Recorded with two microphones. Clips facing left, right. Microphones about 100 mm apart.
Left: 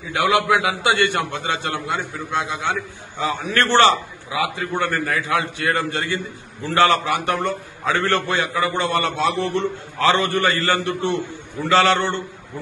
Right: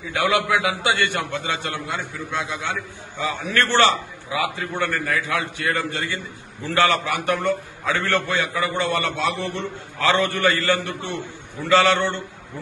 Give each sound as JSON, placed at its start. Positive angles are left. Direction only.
{"t": 0.1, "sound": "a man's voice", "side_deg": 25}